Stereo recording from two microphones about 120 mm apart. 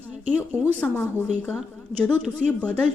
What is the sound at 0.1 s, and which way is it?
Speech, 15° right (ahead or behind).